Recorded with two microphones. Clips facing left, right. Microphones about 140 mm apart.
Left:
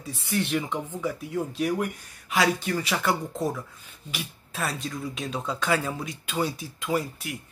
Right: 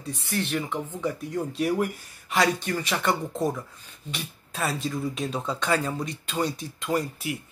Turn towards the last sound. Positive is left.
turn(degrees=0)  # may be behind; listen again after turning